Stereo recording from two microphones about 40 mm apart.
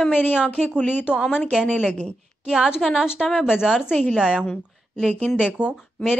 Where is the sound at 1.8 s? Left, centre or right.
Left.